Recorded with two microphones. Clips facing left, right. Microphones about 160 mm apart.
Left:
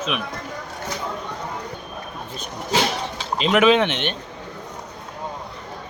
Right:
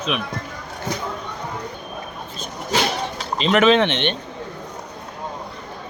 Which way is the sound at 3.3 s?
5° left (ahead or behind).